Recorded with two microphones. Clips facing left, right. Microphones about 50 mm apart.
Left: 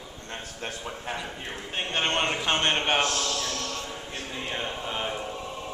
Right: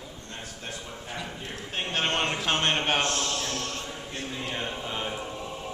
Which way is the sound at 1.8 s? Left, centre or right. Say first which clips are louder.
Left 1 dB; centre.